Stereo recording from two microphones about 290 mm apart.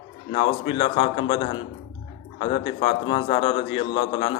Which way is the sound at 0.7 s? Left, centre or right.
Left.